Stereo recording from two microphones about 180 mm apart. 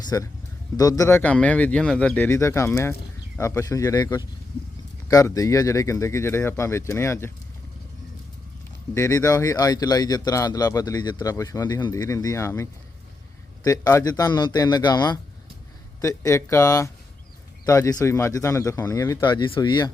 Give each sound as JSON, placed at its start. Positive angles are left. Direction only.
{"t": 0.1, "sound": "speech", "side_deg": 15}
{"t": 9.0, "sound": "speech", "side_deg": 15}
{"t": 13.7, "sound": "speech", "side_deg": 20}